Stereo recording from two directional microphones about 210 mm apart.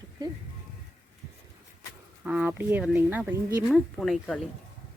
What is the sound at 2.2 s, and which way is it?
Speech, 5° right (ahead or behind).